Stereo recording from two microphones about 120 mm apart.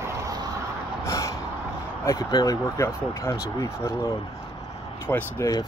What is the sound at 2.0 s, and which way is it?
Speech, 30° left (ahead or behind).